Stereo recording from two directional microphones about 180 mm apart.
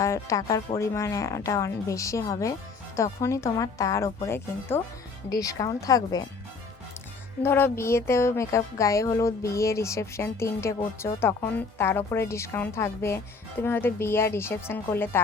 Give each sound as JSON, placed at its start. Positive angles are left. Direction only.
{"t": 0.0, "sound": "speech", "side_deg": 15}
{"t": 7.4, "sound": "speech", "side_deg": 15}